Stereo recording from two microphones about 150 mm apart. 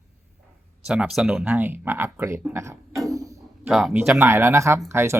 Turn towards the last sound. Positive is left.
turn(degrees=-15)  # may be behind; listen again after turning